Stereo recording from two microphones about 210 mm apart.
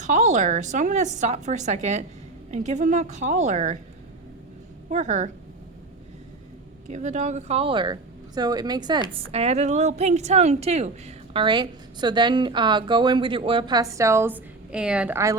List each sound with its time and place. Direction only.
0.0 s a woman's voice: 35° right (ahead or behind)
4.9 s a woman's voice: 35° right (ahead or behind)
6.8 s a woman's voice: 35° right (ahead or behind); by 15.4 s 15° right (ahead or behind)